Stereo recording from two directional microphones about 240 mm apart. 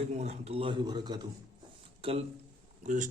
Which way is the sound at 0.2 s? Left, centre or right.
Right.